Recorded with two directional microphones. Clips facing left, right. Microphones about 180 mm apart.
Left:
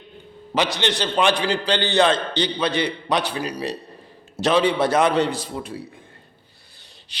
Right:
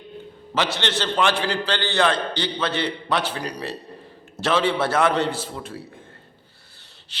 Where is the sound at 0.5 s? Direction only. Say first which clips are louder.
Left 2 dB; 15° left (ahead or behind).